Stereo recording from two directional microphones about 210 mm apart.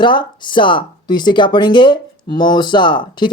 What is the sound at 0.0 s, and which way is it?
Speech, 20° left (ahead or behind).